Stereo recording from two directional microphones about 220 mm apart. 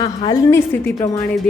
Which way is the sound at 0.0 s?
25° left (ahead or behind).